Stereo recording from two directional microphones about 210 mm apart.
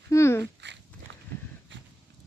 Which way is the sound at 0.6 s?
55° right (ahead or behind).